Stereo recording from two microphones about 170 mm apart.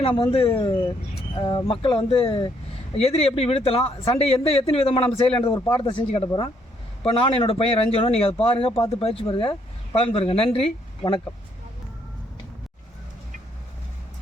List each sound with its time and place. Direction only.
0.0 s speech: 30° left (ahead or behind)
5.5 s speech: 15° left (ahead or behind)
5.8 s speech: 30° left (ahead or behind)